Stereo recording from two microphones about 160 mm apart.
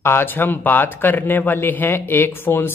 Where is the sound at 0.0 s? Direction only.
15° left (ahead or behind).